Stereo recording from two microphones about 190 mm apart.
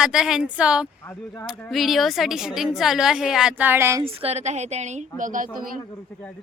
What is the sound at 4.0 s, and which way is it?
A woman's voice, 30° right (ahead or behind).